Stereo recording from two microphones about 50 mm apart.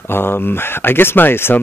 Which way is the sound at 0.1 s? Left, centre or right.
Left.